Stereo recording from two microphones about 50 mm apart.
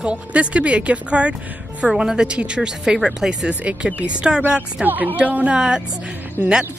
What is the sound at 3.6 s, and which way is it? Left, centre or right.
Speech, right.